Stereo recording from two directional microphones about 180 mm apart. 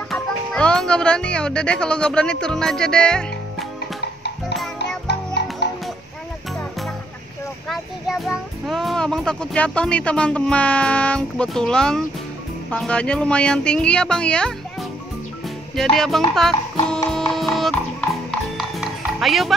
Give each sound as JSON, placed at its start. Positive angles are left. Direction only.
{"t": 0.1, "sound": "speech", "side_deg": 5}
{"t": 4.7, "sound": "music", "side_deg": 65}
{"t": 7.6, "sound": "speech", "side_deg": 0}
{"t": 17.1, "sound": "music", "side_deg": 5}